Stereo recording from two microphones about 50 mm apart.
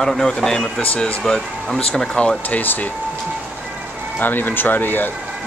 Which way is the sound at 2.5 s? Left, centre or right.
Left.